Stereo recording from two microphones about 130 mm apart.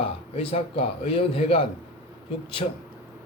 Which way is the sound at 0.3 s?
50° left (ahead or behind).